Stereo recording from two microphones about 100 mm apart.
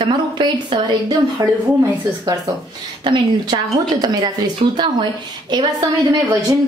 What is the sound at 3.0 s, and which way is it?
Speech, 50° right (ahead or behind).